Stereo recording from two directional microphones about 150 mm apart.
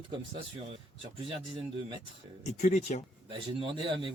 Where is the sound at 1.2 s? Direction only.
40° right (ahead or behind).